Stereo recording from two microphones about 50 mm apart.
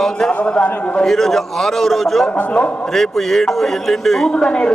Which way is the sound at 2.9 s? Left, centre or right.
Centre.